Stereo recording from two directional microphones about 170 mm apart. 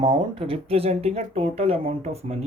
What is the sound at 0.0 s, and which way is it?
Speech, 35° right (ahead or behind).